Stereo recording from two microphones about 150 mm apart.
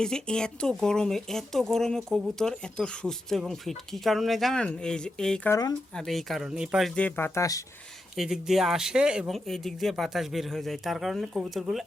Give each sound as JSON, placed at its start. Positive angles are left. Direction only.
{"t": 0.0, "sound": "speech", "side_deg": 5}
{"t": 5.5, "sound": "speech", "side_deg": 25}
{"t": 5.9, "sound": "speech", "side_deg": 0}
{"t": 6.9, "sound": "speech", "side_deg": 10}
{"t": 8.1, "sound": "speech", "side_deg": 0}